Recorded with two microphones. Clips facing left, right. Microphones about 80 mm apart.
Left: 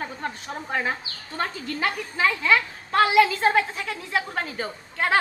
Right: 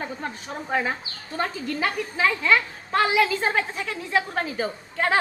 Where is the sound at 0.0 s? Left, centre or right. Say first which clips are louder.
Even; centre.